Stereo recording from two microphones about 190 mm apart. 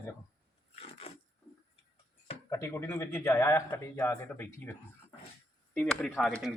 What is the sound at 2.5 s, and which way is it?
Speech, 15° left (ahead or behind).